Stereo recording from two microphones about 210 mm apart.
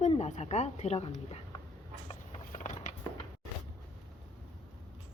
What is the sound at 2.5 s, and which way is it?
Mechanisms, 35° left (ahead or behind).